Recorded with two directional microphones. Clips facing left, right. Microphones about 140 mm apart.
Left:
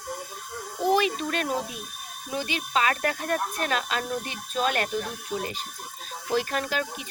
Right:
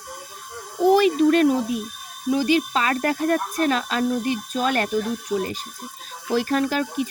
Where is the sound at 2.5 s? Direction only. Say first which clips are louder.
Right 4 dB; 40° right (ahead or behind).